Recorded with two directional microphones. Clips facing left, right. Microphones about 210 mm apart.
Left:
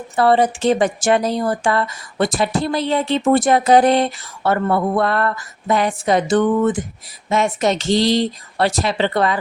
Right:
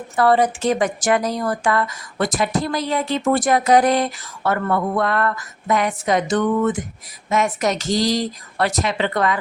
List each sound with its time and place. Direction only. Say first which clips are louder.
0.2 s speech: left 2 dB; 30° left (ahead or behind)